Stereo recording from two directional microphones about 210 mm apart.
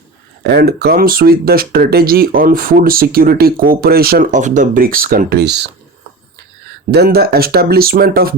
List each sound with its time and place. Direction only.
0.4 s speech: 50° right (ahead or behind)
6.9 s speech: 50° right (ahead or behind)